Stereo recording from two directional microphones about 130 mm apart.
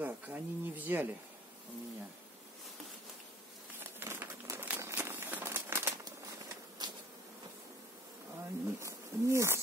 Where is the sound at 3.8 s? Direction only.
15° right (ahead or behind).